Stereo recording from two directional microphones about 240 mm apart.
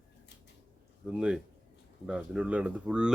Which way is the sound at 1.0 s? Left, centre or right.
Centre.